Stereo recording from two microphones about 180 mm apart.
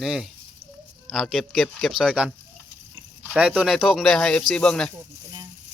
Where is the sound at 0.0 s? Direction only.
Centre (ahead or behind).